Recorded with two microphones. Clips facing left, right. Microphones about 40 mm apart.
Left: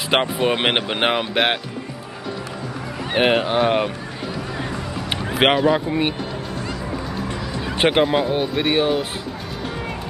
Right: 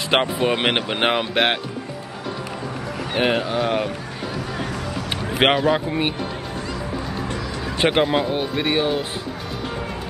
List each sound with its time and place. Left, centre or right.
0.1 s speech: centre
3.1 s speech: left
3.4 s speech: left
5.4 s speech: centre
7.9 s speech: centre